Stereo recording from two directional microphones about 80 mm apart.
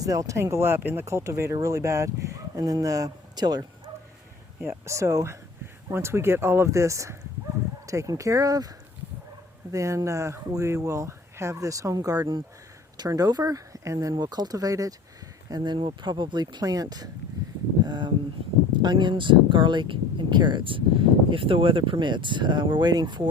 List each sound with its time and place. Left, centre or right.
0.0 s speech: right
4.6 s speech: right
9.7 s speech: right
14.2 s speech: right
15.4 s speech: right
17.4 s a sound: right
17.8 s speech: right